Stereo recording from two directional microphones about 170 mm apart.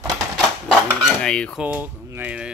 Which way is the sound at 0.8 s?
Centre (ahead or behind).